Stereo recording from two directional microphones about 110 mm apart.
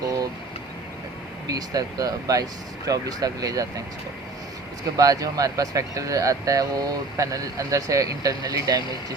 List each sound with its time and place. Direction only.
1.5 s speech: 35° right (ahead or behind)
4.9 s speech: 35° right (ahead or behind)